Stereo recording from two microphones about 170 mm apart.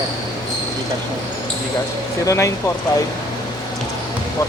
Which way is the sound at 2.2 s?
20° left (ahead or behind).